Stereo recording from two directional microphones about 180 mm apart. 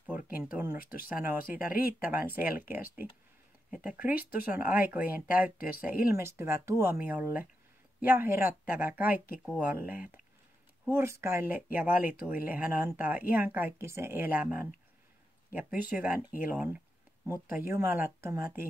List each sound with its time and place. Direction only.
0.1 s a sound: 10° right (ahead or behind)
0.8 s speech: 10° right (ahead or behind)
9.1 s speech: 55° left (ahead or behind)
9.6 s speech: 10° right (ahead or behind)
15.5 s speech: 10° right (ahead or behind)